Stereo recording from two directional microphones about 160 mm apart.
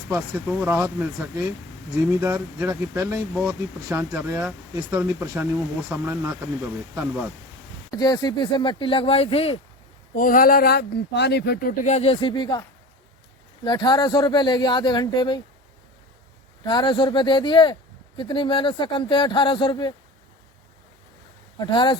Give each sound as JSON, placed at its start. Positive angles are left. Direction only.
{"t": 0.1, "sound": "speech", "side_deg": -10}
{"t": 2.2, "sound": "speech", "side_deg": -15}
{"t": 7.9, "sound": "speech", "side_deg": 25}
{"t": 10.2, "sound": "speech", "side_deg": 60}
{"t": 11.9, "sound": "speech", "side_deg": 40}
{"t": 13.7, "sound": "speech", "side_deg": 25}
{"t": 16.6, "sound": "speech", "side_deg": 30}
{"t": 21.6, "sound": "speech", "side_deg": 30}